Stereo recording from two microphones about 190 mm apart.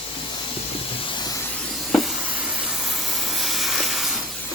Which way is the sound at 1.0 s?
25° left (ahead or behind).